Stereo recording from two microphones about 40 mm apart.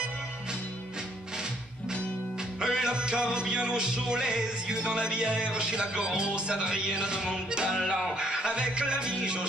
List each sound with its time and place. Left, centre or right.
2.6 s music: centre